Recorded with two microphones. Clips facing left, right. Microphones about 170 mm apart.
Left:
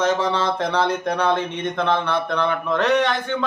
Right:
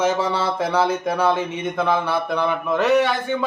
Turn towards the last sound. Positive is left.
turn(degrees=-10)  # may be behind; listen again after turning